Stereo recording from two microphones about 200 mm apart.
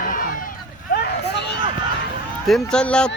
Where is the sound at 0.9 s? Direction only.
55° left (ahead or behind).